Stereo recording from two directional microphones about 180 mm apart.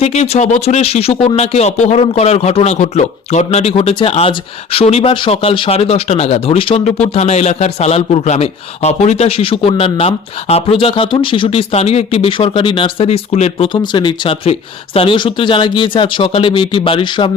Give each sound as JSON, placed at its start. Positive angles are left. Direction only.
{"t": 0.0, "sound": "speech", "side_deg": 35}